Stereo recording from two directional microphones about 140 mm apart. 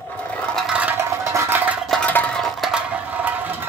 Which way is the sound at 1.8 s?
Centre (ahead or behind).